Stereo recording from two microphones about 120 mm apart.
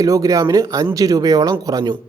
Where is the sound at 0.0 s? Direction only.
30° right (ahead or behind).